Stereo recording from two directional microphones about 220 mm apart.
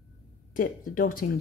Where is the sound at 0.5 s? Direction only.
40° left (ahead or behind).